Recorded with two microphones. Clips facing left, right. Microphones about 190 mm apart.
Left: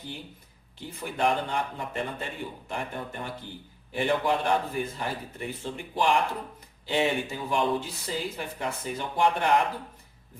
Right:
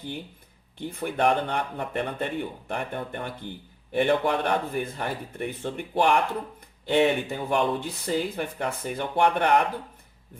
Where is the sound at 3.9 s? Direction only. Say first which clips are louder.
Right 3 dB; 60° right (ahead or behind).